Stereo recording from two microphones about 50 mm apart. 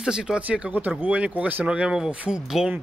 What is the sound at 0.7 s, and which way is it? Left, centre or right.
Speech, right.